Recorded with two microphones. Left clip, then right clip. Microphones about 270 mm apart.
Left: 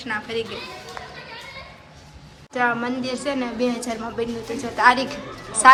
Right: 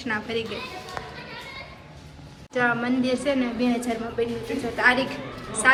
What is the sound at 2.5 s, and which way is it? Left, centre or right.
Speech, centre.